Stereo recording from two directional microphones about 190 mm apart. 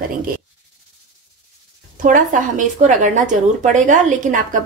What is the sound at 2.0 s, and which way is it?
A woman's voice, 45° right (ahead or behind).